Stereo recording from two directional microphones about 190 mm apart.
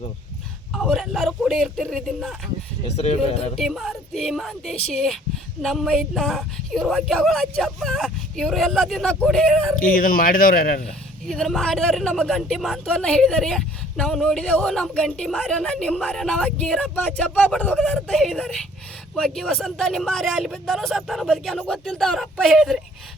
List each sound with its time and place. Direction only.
0.8 s a woman's voice: centre (ahead or behind)
2.8 s speech: 35° left (ahead or behind)
3.6 s a woman's voice: centre (ahead or behind)
9.8 s speech: 50° left (ahead or behind)
11.3 s a woman's voice: centre (ahead or behind)